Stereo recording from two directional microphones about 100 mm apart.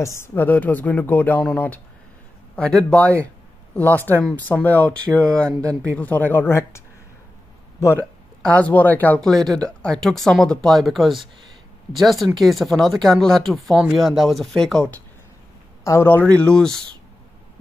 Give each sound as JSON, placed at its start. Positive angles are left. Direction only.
{"t": 0.2, "sound": "speech", "side_deg": 20}
{"t": 2.5, "sound": "speech", "side_deg": 10}
{"t": 8.0, "sound": "speech", "side_deg": 10}
{"t": 9.2, "sound": "speech", "side_deg": 5}
{"t": 15.8, "sound": "speech", "side_deg": 25}